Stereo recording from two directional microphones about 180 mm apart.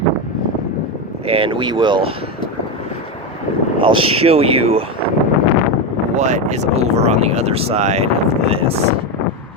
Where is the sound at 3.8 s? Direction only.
30° right (ahead or behind).